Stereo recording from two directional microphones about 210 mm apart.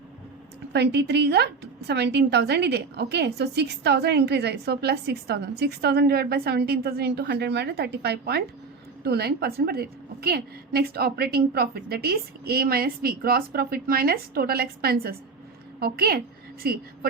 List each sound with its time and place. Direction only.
0.7 s a woman's voice: 55° right (ahead or behind)